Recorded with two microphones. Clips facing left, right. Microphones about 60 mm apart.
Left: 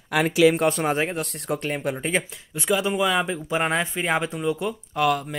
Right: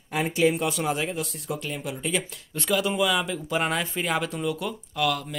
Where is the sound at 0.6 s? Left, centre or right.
Left.